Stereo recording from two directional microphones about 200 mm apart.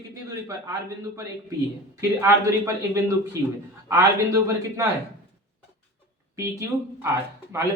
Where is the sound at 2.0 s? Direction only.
15° right (ahead or behind).